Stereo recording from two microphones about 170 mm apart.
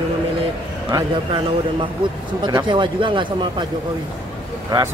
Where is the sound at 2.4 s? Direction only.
25° right (ahead or behind).